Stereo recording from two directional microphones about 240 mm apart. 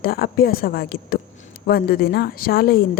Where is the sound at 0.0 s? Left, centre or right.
Left.